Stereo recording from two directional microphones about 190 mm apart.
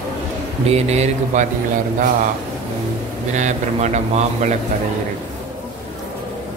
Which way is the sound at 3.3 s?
35° right (ahead or behind).